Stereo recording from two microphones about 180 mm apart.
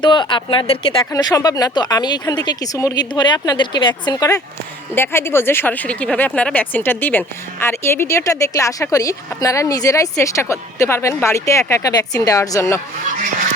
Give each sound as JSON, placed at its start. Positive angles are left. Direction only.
{"t": 0.0, "sound": "speech", "side_deg": 25}
{"t": 1.1, "sound": "speech", "side_deg": 20}